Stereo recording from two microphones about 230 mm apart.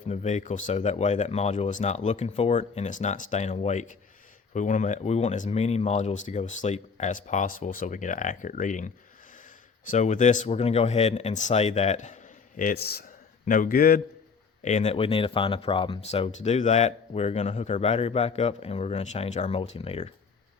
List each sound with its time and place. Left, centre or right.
0.1 s speech: left
9.9 s speech: left